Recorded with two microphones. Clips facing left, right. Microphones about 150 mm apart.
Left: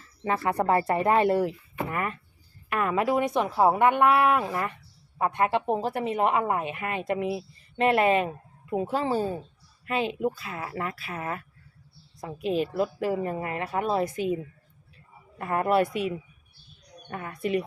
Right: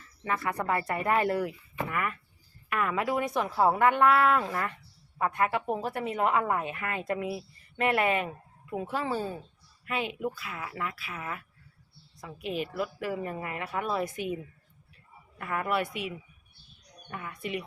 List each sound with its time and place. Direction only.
0.0 s a woman's voice: 30° left (ahead or behind)